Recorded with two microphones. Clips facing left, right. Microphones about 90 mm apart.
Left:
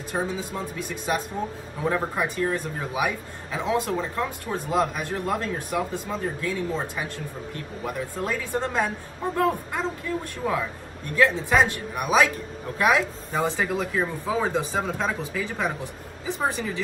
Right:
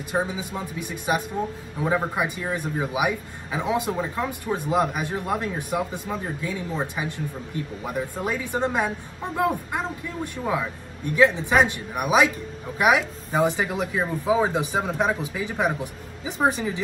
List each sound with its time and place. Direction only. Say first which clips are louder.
0.1 s speech: right 2 dB; 15° right (ahead or behind)